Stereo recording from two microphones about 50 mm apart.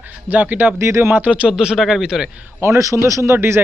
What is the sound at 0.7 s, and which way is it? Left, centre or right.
Speech, right.